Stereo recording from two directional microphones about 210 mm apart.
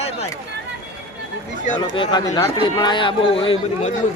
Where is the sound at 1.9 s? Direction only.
20° left (ahead or behind).